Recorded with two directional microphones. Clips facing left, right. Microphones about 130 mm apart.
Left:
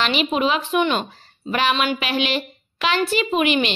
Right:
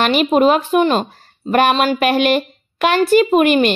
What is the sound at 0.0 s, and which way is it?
A woman's voice, 50° right (ahead or behind).